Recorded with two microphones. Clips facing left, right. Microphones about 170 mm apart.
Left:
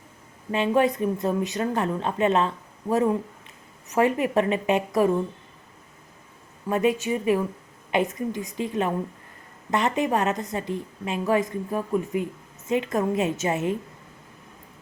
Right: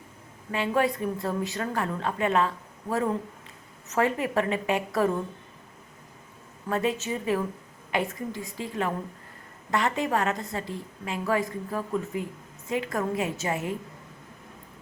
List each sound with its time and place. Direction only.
0.5 s a woman's voice: 20° left (ahead or behind)
6.7 s a woman's voice: 15° left (ahead or behind)